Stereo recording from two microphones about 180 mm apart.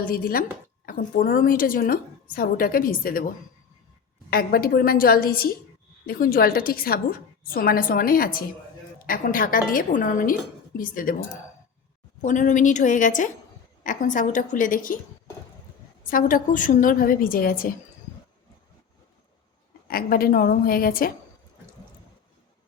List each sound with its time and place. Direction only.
0.0 s a woman's voice: 55° left (ahead or behind)
12.2 s a woman's voice: 45° left (ahead or behind)
16.0 s a woman's voice: 50° left (ahead or behind)
19.9 s a woman's voice: 55° left (ahead or behind)